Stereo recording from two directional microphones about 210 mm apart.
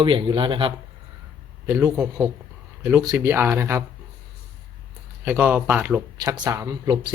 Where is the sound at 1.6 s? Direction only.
15° right (ahead or behind).